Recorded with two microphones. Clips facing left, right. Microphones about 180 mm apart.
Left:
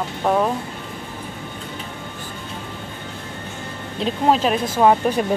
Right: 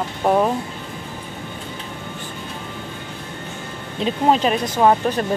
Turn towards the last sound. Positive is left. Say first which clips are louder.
# even
turn(degrees=5)  # may be behind; listen again after turning